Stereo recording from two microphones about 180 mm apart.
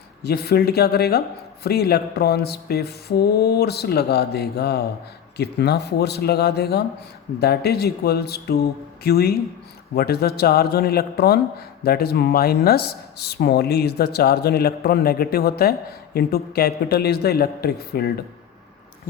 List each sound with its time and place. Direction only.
0.2 s speech: 60° left (ahead or behind)